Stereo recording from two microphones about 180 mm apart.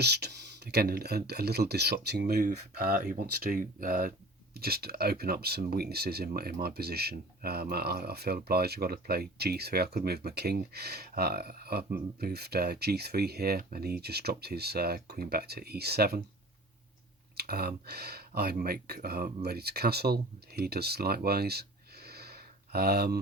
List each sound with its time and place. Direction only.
0.0 s speech: 65° right (ahead or behind)
17.3 s speech: 60° right (ahead or behind)
21.2 s a sound: 60° right (ahead or behind)